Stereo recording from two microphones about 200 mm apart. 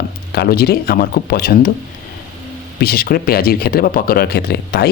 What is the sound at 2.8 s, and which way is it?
Speech, 50° left (ahead or behind).